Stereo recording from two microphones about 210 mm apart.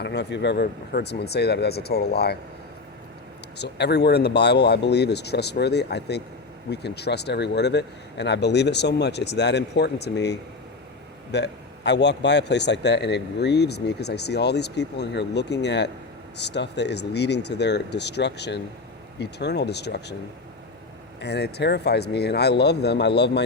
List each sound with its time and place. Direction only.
0.0 s speech: 55° left (ahead or behind)
3.6 s speech: 55° left (ahead or behind)
21.2 s speech: 50° left (ahead or behind)